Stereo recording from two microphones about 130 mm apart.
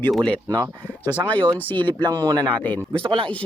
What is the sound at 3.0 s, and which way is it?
Speech, 40° right (ahead or behind).